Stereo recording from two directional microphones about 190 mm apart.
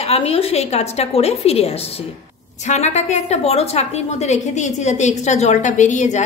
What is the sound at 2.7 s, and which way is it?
A woman's voice, 35° left (ahead or behind).